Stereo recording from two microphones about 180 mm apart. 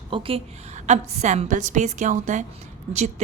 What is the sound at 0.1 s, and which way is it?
A woman's voice, 30° right (ahead or behind).